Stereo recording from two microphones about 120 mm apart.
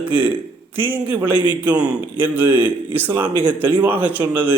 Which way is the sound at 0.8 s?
15° right (ahead or behind).